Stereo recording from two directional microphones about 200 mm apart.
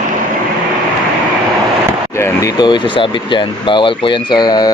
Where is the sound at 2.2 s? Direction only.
15° left (ahead or behind).